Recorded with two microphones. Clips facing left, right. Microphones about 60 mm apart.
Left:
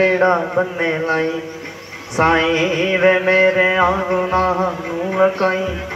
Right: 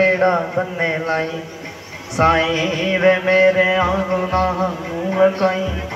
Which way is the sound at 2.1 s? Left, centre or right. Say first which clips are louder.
Left 1 dB; left.